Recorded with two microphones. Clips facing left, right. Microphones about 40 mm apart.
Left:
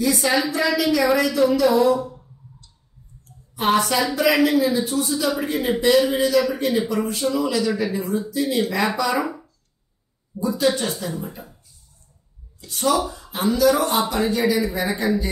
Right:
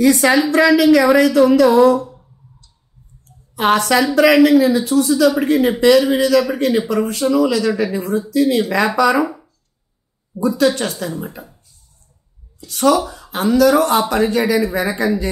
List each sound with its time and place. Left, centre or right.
0.0 s a woman's voice: right
2.0 s a sound: centre
3.5 s speech: right
5.3 s speech: right
10.3 s speech: right
11.0 s a woman's voice: right
12.6 s speech: right